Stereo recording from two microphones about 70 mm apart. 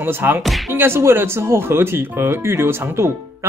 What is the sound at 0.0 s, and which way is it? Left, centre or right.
Speech, right.